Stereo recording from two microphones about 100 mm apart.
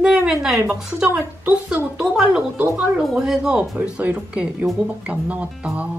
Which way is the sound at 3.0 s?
5° right (ahead or behind).